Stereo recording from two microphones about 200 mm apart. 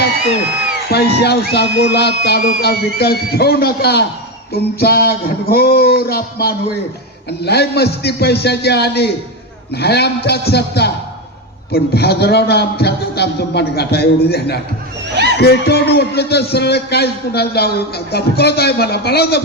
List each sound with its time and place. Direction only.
0.9 s a man's voice: 55° left (ahead or behind)